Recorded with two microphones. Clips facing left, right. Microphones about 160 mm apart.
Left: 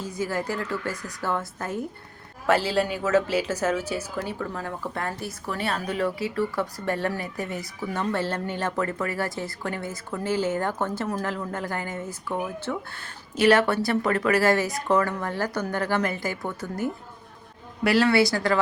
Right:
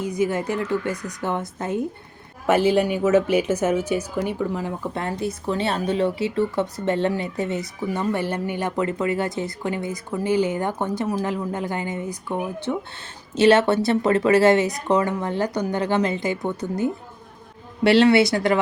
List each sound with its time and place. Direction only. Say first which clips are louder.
0.0 s speech: right 6 dB; 20° right (ahead or behind)